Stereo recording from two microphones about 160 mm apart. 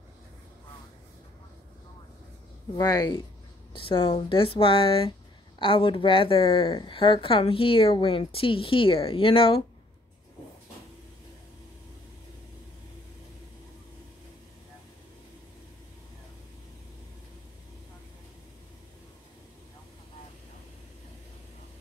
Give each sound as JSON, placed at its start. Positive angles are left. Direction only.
{"t": 2.7, "sound": "a woman's voice", "side_deg": 25}